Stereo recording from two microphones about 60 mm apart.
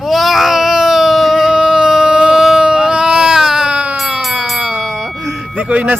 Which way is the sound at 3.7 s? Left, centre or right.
Right.